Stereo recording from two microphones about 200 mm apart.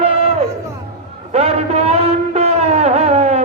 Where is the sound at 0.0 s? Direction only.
30° right (ahead or behind).